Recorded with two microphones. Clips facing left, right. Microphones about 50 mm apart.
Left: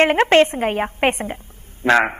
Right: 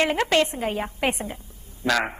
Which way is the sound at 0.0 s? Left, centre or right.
Left.